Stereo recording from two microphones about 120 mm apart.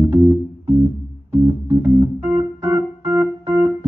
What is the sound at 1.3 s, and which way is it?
Organ, 25° right (ahead or behind).